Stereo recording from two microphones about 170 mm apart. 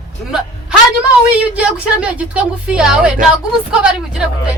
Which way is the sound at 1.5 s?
5° right (ahead or behind).